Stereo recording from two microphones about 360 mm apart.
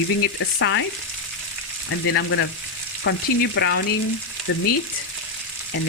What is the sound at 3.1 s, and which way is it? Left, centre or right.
Frying, left.